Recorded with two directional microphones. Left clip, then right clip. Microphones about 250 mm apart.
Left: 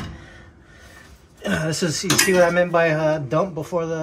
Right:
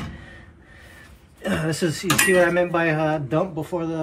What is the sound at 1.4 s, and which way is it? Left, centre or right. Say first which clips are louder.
Cutlery: left 1 dB; centre.